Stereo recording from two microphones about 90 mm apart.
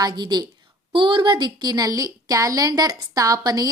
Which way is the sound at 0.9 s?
65° right (ahead or behind).